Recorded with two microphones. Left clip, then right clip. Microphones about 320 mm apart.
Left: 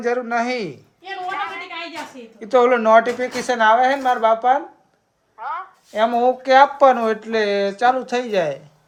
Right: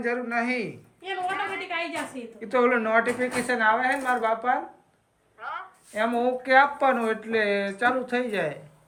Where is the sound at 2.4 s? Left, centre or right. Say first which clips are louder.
Left 7 dB; centre.